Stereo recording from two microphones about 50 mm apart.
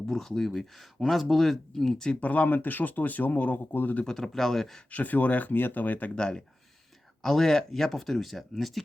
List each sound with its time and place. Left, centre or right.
0.1 s speech: centre
2.0 s speech: left
4.0 s speech: centre
4.9 s speech: left
6.1 s speech: centre